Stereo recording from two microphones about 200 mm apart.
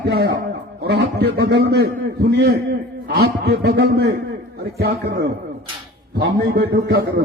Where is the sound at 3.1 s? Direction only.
55° right (ahead or behind).